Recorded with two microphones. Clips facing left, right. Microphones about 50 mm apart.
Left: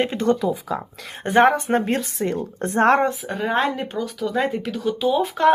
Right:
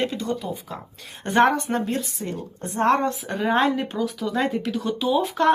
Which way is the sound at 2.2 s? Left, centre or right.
Left.